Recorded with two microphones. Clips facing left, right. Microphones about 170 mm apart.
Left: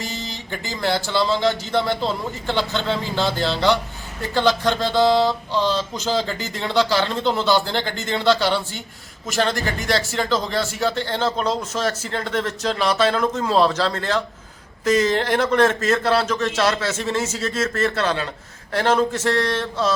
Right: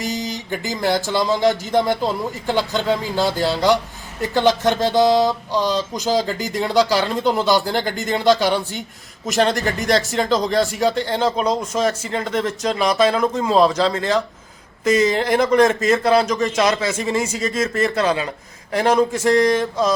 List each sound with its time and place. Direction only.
0.7 s speech: 15° right (ahead or behind)
7.2 s speech: 40° right (ahead or behind)
7.4 s speech: 10° right (ahead or behind)
9.3 s speech: centre (ahead or behind)